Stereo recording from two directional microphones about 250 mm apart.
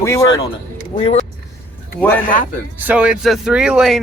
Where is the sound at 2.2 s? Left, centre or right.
Left.